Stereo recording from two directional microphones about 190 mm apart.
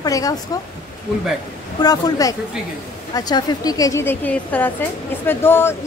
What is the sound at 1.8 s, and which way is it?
A woman's voice, 20° left (ahead or behind).